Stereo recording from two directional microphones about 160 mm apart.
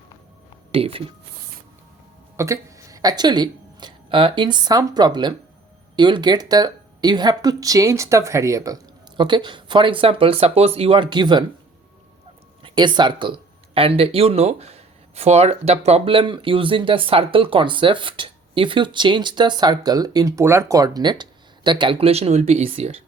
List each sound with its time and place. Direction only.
0.7 s speech: 35° right (ahead or behind)
2.3 s speech: 20° right (ahead or behind)
12.6 s speech: 30° right (ahead or behind)